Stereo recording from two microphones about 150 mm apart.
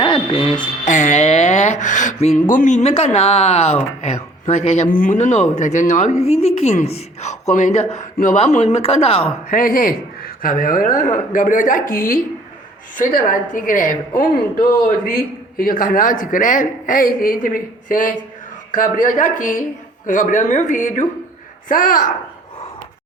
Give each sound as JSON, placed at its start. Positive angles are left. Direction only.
{"t": 0.0, "sound": "a sound", "side_deg": 35}
{"t": 0.9, "sound": "a woman's voice", "side_deg": 55}
{"t": 4.9, "sound": "a woman's voice", "side_deg": 65}
{"t": 9.5, "sound": "speech", "side_deg": 70}
{"t": 21.7, "sound": "a woman's voice", "side_deg": 65}